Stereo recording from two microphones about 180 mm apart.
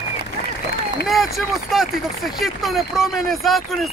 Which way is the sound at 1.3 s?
Centre (ahead or behind).